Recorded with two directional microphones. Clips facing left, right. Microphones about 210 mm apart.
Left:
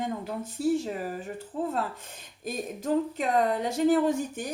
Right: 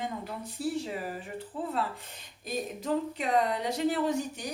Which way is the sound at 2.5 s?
45° left (ahead or behind).